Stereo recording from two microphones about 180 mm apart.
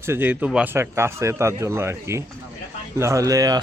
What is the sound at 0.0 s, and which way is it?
Speech, 10° right (ahead or behind).